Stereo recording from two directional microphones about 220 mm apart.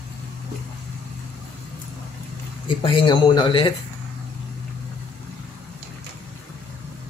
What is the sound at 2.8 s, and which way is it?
Speech, 20° left (ahead or behind).